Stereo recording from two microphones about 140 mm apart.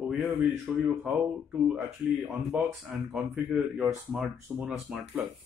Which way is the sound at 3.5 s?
5° right (ahead or behind).